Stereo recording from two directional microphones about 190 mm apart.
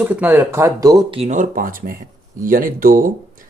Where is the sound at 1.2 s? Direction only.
40° right (ahead or behind).